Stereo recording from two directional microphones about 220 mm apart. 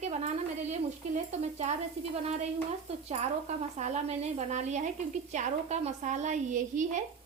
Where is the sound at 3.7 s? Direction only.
30° right (ahead or behind).